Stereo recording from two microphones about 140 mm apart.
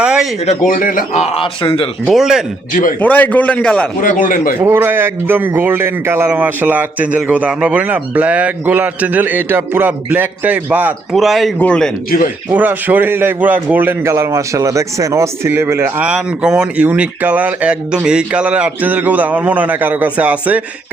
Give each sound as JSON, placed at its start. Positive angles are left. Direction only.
{"t": 0.0, "sound": "a sound", "side_deg": -5}
{"t": 0.4, "sound": "a man's voice", "side_deg": 65}
{"t": 1.2, "sound": "a man's voice", "side_deg": 40}
{"t": 2.0, "sound": "speech", "side_deg": -5}
{"t": 3.0, "sound": "a man's voice", "side_deg": 10}
{"t": 4.0, "sound": "speech", "side_deg": 80}
{"t": 4.6, "sound": "a man's voice", "side_deg": -15}
{"t": 11.1, "sound": "a man's voice", "side_deg": 0}
{"t": 12.5, "sound": "a man's voice", "side_deg": -10}
{"t": 16.0, "sound": "a man's voice", "side_deg": -5}